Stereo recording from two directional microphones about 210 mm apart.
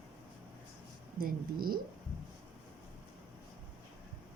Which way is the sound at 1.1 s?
45° right (ahead or behind).